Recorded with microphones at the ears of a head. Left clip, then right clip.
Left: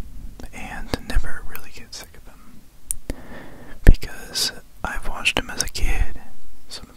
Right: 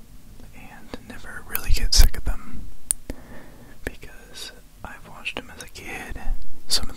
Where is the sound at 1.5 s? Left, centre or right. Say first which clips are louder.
Right 13 dB; right.